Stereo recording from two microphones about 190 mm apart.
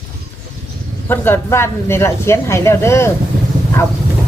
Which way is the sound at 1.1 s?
10° left (ahead or behind).